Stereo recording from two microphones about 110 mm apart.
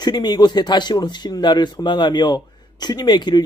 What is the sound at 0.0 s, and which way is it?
Speech, 40° left (ahead or behind).